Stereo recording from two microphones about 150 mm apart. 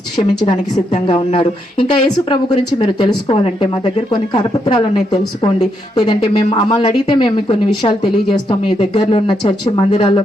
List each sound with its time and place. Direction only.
1.0 s speech: 35° left (ahead or behind)